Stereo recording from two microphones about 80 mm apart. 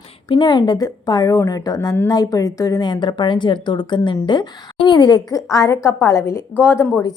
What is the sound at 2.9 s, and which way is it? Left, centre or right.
A woman's voice, left.